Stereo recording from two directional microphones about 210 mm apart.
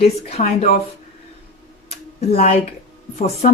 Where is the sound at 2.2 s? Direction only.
30° left (ahead or behind).